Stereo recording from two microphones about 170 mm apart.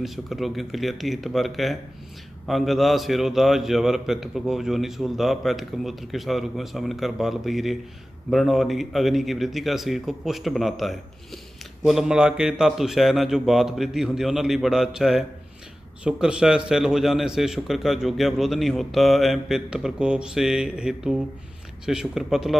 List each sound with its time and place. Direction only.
0.0 s a man's voice: centre (ahead or behind)